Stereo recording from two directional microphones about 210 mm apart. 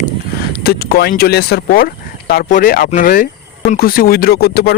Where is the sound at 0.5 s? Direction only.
50° left (ahead or behind).